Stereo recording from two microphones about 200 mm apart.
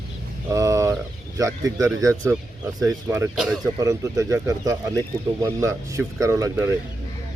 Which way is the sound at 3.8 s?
15° right (ahead or behind).